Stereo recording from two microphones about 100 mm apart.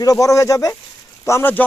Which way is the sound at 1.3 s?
25° left (ahead or behind).